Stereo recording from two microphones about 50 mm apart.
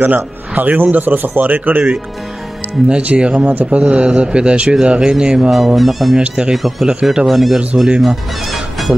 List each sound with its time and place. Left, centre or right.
0.0 s a man's voice: right
3.0 s speech: right
3.4 s speech: right
3.8 s speech: right
5.8 s speech: centre
6.2 s speech: centre
6.5 s speech: centre
8.0 s music: centre